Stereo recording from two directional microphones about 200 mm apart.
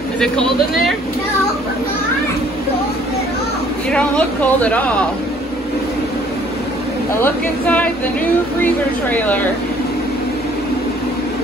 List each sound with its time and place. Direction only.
0.2 s speech: centre (ahead or behind)
3.9 s speech: 5° left (ahead or behind)
7.2 s speech: 10° left (ahead or behind)
9.1 s speech: 10° left (ahead or behind)